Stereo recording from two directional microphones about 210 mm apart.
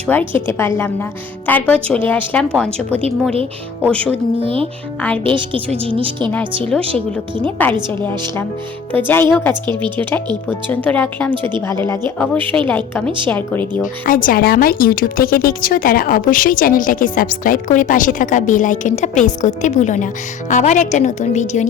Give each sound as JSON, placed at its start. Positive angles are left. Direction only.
{"t": 0.1, "sound": "a woman's voice", "side_deg": 10}
{"t": 1.5, "sound": "a woman's voice", "side_deg": 10}
{"t": 4.4, "sound": "a woman's voice", "side_deg": -25}
{"t": 7.4, "sound": "a woman's voice", "side_deg": 10}
{"t": 9.6, "sound": "a woman's voice", "side_deg": -20}
{"t": 10.5, "sound": "a woman's voice", "side_deg": 10}
{"t": 14.0, "sound": "speech", "side_deg": 40}